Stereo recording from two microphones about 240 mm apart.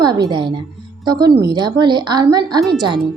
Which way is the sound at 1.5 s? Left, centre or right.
Centre.